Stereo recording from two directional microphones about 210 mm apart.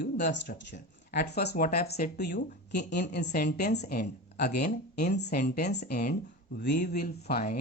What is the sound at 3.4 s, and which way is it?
Speech, 35° left (ahead or behind).